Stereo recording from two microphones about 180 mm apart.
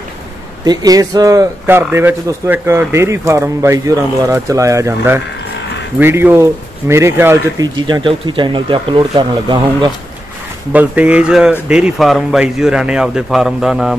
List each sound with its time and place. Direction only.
0.7 s speech: 20° right (ahead or behind)
10.7 s a man's voice: 10° right (ahead or behind)